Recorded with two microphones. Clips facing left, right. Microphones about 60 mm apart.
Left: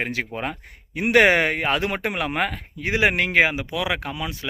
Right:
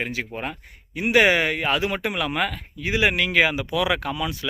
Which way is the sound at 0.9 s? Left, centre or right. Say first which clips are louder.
Left 2 dB; left.